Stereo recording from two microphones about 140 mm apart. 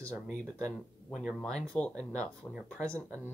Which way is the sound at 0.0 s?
10° left (ahead or behind).